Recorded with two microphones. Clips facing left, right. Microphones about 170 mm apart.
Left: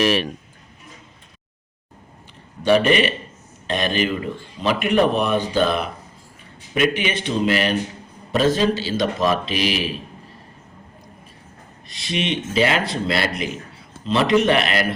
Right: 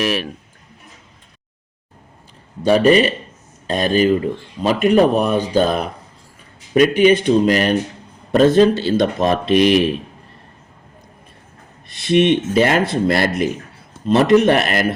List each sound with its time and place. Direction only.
0.0 s speech: centre (ahead or behind)
2.6 s speech: 35° right (ahead or behind); by 9.9 s 55° right (ahead or behind)
11.9 s speech: 55° right (ahead or behind)